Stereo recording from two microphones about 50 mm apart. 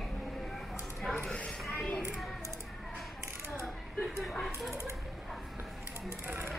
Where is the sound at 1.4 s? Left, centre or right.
Left.